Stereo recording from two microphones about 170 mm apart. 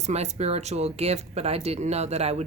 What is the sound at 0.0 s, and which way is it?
Speech, 40° right (ahead or behind).